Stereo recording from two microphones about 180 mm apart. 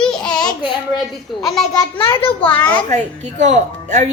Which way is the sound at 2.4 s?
10° left (ahead or behind).